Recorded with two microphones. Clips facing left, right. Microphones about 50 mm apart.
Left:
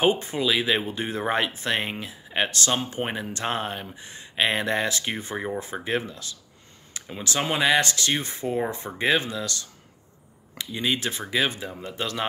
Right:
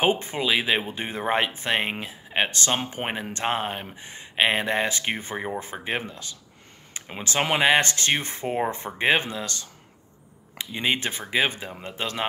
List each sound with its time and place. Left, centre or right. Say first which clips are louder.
0.0 s speech: left 1 dB; right
3.4 s speech: right 2 dB; centre
3.9 s speech: right 2 dB; right
5.6 s speech: left 2 dB; right
10.7 s speech: right 1 dB; right